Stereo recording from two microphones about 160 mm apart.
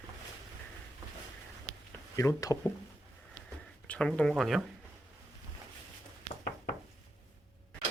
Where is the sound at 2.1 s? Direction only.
20° left (ahead or behind).